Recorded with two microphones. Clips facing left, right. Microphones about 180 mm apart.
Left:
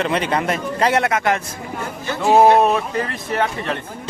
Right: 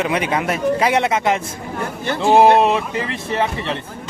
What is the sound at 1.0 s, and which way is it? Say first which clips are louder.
Speech: right 1 dB; 20° right (ahead or behind).